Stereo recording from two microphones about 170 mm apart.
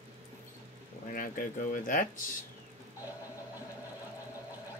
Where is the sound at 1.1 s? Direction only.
55° left (ahead or behind).